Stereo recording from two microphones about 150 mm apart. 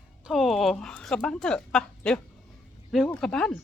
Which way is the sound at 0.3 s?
Centre (ahead or behind).